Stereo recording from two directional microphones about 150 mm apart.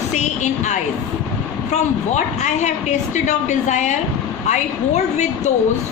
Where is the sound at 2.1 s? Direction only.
50° left (ahead or behind).